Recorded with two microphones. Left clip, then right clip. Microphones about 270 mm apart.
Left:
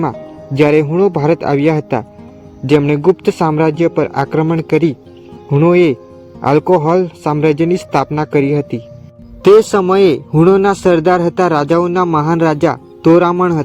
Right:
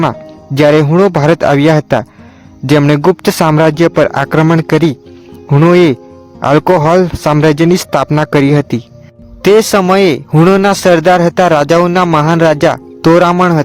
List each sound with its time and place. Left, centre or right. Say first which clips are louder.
0.0 s speech: right 5 dB; right